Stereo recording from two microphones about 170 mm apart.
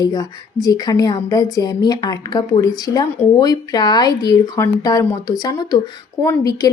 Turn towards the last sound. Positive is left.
turn(degrees=20)  # may be behind; listen again after turning